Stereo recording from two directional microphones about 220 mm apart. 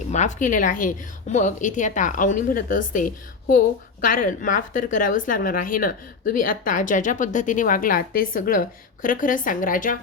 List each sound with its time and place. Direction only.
0.1 s speech: 35° left (ahead or behind)